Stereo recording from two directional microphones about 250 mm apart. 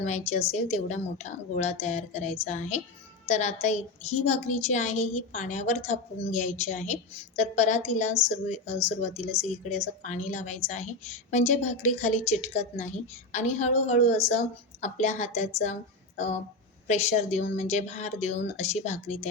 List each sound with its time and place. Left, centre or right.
0.0 s a woman's voice: left